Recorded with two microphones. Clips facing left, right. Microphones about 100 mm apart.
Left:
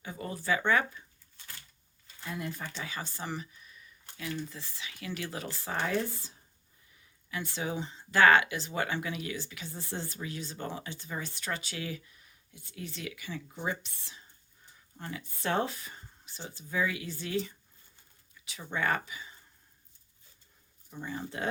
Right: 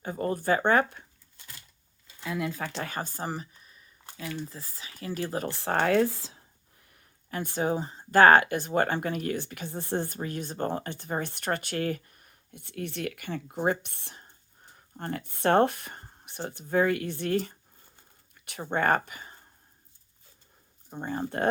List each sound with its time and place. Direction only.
0.0 s speech: 45° right (ahead or behind)
2.2 s speech: 90° right
2.8 s speech: 50° right (ahead or behind)
5.5 s speech: 70° right (ahead or behind); by 19.4 s 50° right (ahead or behind)
20.9 s speech: 50° right (ahead or behind)